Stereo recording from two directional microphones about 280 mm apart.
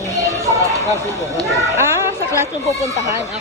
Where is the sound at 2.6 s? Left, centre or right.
Left.